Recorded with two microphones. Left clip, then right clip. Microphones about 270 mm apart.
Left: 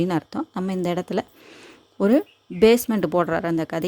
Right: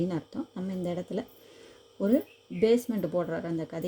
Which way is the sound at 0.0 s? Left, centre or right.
Left.